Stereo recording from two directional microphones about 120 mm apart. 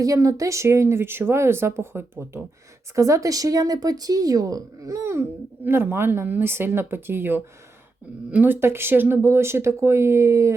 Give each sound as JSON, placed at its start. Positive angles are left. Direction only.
{"t": 0.0, "sound": "speech", "side_deg": -30}